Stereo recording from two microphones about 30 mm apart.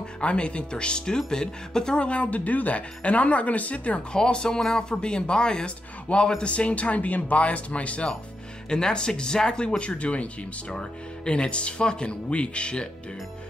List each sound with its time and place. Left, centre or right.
0.2 s speech: left
2.0 s speech: left
2.3 s speech: left
4.1 s speech: left
6.5 s speech: left
7.3 s speech: left
8.6 s speech: left
10.7 s speech: left